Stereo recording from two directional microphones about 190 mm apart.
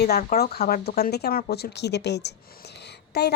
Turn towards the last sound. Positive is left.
turn(degrees=60)  # may be behind; listen again after turning